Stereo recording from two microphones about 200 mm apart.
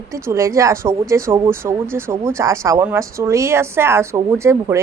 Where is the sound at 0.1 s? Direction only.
15° right (ahead or behind).